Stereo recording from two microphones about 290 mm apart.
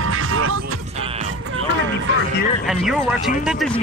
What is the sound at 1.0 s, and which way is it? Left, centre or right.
Music, right.